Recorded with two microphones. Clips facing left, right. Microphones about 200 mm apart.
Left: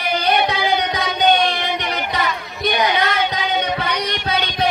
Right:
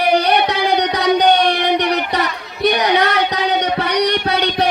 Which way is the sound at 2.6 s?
65° right (ahead or behind).